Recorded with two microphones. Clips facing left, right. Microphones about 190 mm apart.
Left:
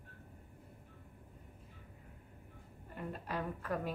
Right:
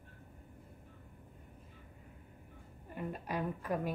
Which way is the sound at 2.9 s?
15° right (ahead or behind).